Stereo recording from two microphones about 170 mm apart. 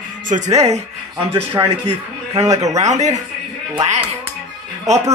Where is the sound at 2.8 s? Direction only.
45° right (ahead or behind).